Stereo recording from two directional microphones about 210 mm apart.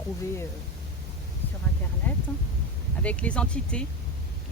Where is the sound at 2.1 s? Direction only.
10° left (ahead or behind).